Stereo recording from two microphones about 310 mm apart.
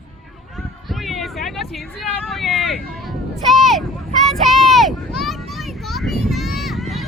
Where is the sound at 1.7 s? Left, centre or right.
Centre.